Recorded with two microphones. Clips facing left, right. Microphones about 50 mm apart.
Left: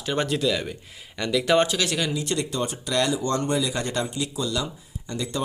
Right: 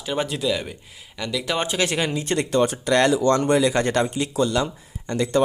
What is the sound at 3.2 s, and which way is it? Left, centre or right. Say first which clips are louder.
Speech: right 7 dB; right.